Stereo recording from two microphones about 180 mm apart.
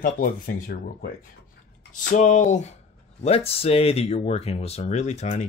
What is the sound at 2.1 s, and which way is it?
Speech, 40° left (ahead or behind).